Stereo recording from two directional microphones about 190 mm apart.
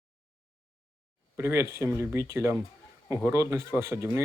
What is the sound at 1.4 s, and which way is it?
Speech, 15° right (ahead or behind).